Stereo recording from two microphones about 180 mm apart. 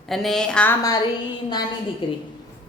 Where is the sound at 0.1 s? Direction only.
Centre (ahead or behind).